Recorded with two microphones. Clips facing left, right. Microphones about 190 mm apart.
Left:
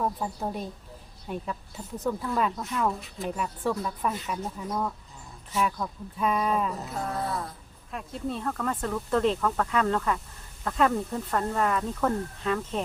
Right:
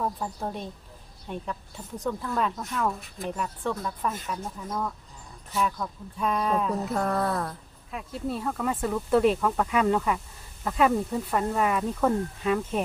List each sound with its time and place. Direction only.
0.0 s speech: 5° left (ahead or behind)
6.9 s a sound: 65° right (ahead or behind)
7.9 s speech: 5° right (ahead or behind)